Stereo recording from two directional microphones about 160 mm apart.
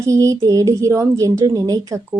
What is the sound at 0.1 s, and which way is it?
A woman's voice, 20° right (ahead or behind).